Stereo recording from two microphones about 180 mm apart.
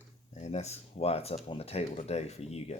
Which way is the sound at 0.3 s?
40° left (ahead or behind).